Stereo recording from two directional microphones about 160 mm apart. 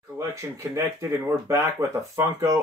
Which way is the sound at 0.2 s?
20° right (ahead or behind).